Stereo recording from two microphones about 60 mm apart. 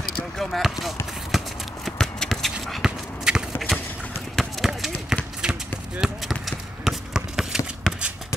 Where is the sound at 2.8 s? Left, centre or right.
Centre.